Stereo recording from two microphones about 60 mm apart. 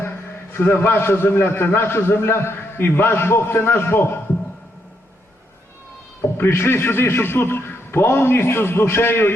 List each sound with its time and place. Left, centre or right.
0.5 s a man's voice: left
6.2 s a man's voice: left